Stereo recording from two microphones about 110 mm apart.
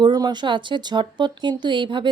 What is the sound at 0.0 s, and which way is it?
Speech, 40° right (ahead or behind).